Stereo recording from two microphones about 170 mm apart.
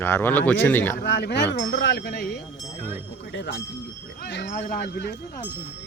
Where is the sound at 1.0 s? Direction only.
80° left.